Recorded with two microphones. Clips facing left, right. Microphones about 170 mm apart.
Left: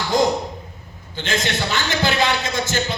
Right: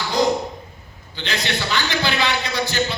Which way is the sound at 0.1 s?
45° left (ahead or behind).